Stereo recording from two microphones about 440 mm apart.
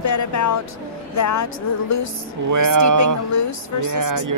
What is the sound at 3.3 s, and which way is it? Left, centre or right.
Speech, left.